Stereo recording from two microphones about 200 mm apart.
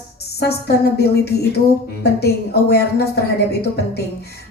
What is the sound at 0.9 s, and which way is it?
A woman's voice, 55° left (ahead or behind).